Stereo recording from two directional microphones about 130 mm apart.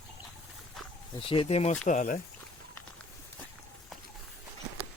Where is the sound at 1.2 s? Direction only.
45° left (ahead or behind); by 2.2 s 70° left (ahead or behind).